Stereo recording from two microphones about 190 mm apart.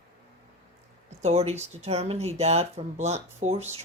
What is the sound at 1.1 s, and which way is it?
Speech, 35° right (ahead or behind).